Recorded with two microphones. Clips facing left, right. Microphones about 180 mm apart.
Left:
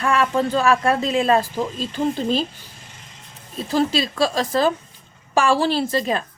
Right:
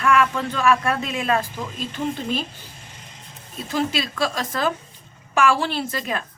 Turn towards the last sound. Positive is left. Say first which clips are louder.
# left 6 dB
turn(degrees=30)  # may be behind; listen again after turning